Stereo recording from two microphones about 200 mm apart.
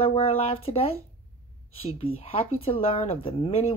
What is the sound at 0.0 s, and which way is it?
Speech, 30° left (ahead or behind).